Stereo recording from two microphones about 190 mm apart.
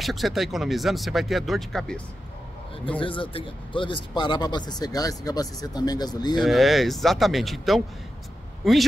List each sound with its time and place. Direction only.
0.0 s speech: centre (ahead or behind)
3.0 s speech: 25° left (ahead or behind)
6.4 s speech: centre (ahead or behind)